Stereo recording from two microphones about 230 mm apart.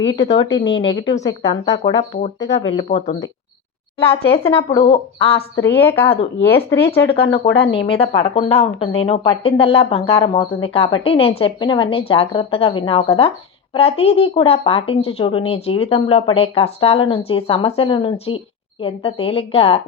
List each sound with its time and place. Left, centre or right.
0.0 s speech: left
0.8 s speech: left
5.5 s a woman's voice: centre
7.5 s speech: left